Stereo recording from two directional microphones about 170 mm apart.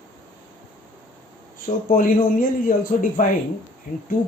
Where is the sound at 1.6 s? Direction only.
55° left (ahead or behind).